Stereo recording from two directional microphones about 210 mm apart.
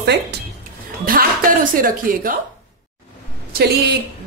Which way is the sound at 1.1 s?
45° right (ahead or behind).